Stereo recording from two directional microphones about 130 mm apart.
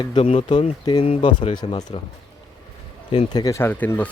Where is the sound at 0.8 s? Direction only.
35° left (ahead or behind).